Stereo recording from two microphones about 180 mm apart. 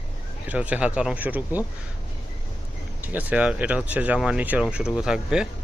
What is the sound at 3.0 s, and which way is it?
Speech, 10° right (ahead or behind).